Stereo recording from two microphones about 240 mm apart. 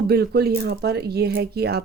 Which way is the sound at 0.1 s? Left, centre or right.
Right.